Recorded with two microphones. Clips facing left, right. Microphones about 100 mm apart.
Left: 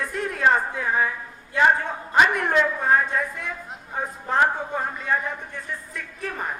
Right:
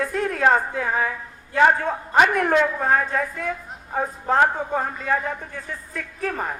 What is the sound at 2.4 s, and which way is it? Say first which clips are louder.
Speech: right 1 dB; 55° right (ahead or behind).